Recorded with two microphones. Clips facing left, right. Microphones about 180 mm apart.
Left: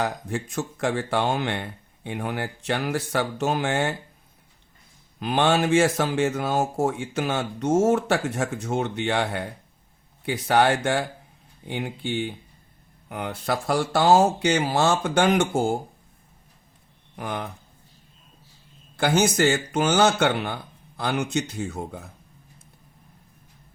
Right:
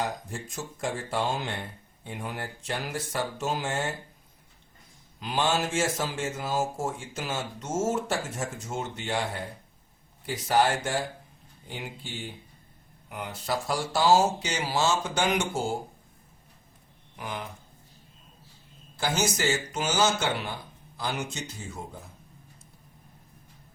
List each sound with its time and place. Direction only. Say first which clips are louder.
0.0 s speech: left 5 dB; 70° left (ahead or behind)
5.2 s speech: left 6 dB; 60° left (ahead or behind)
17.2 s speech: left 6 dB; 55° left (ahead or behind)
18.9 s speech: left 7 dB; 60° left (ahead or behind)